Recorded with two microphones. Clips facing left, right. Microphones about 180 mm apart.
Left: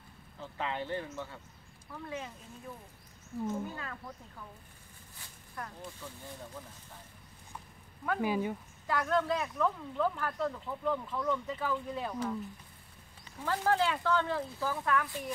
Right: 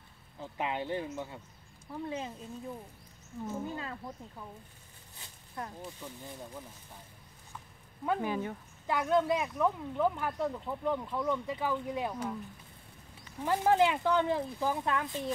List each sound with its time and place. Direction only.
0.4 s speech: 15° right (ahead or behind)
3.6 s speech: 25° right (ahead or behind)
5.2 s speech: 20° right (ahead or behind)
8.2 s speech: 10° left (ahead or behind)
8.8 s speech: 20° right (ahead or behind)
13.4 s speech: 20° right (ahead or behind)